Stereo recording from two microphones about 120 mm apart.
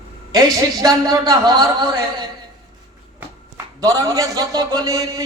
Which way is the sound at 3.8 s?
30° right (ahead or behind).